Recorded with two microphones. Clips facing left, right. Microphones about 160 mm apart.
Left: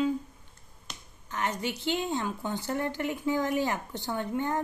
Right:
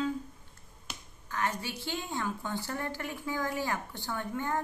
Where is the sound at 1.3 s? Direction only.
20° left (ahead or behind).